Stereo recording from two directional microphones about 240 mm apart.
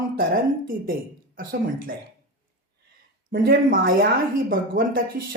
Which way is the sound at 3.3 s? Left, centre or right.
Right.